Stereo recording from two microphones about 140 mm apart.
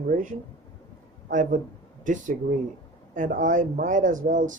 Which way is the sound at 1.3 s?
70° right (ahead or behind).